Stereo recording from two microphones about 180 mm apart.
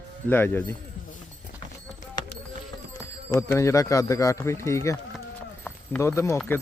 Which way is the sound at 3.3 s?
15° left (ahead or behind).